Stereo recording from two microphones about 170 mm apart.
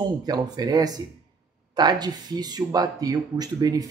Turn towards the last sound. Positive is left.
turn(degrees=-20)  # may be behind; listen again after turning